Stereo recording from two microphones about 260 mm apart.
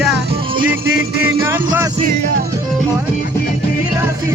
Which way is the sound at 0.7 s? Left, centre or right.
Centre.